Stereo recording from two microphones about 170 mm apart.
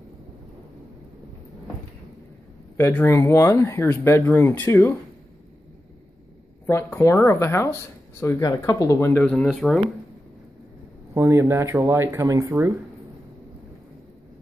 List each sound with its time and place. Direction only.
2.8 s speech: 10° left (ahead or behind)
6.6 s speech: 15° left (ahead or behind)
9.2 s speech: 5° left (ahead or behind)
11.1 s speech: 15° right (ahead or behind)